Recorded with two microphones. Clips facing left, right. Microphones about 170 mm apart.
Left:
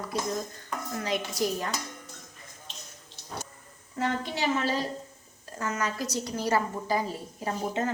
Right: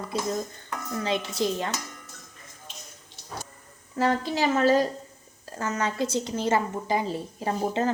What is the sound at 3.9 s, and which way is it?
Speech, 35° right (ahead or behind).